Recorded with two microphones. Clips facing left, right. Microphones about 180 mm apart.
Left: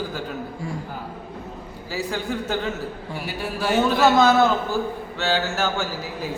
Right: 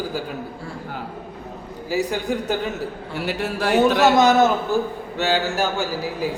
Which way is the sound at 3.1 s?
70° right (ahead or behind).